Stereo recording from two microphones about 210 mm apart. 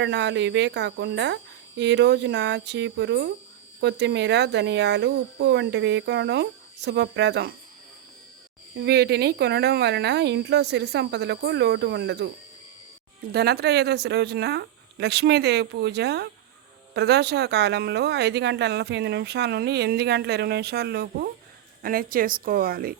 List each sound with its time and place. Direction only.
0.0 s speech: 55° right (ahead or behind)
8.8 s speech: 50° right (ahead or behind)
13.3 s speech: 50° right (ahead or behind)